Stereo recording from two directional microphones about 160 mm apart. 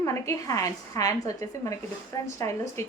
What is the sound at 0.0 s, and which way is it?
Speech, 20° left (ahead or behind).